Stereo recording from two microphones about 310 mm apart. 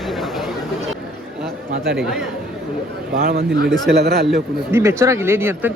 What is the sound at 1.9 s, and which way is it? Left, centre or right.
Speech, centre.